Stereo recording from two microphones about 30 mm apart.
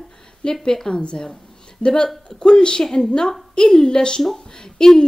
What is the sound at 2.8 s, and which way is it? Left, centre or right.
Speech, centre.